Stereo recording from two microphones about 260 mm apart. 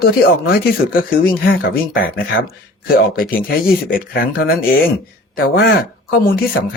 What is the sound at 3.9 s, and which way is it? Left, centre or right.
Speech, left.